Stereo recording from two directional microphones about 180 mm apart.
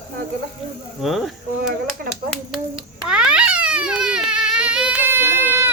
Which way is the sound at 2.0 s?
55° right (ahead or behind).